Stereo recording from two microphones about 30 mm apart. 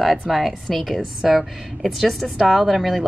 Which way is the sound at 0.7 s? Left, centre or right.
Centre.